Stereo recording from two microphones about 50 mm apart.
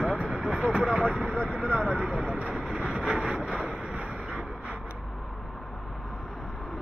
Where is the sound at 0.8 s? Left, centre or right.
Centre.